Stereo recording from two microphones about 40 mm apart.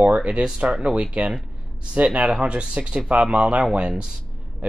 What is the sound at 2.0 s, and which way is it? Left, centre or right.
Speech, right.